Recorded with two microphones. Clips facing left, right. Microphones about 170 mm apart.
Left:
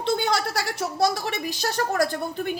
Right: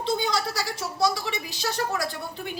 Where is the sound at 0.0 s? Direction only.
60° left (ahead or behind).